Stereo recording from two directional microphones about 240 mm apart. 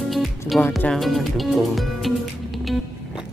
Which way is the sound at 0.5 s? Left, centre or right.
Centre.